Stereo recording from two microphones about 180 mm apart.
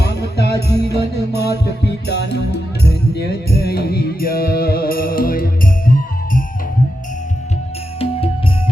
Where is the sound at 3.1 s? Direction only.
65° left (ahead or behind).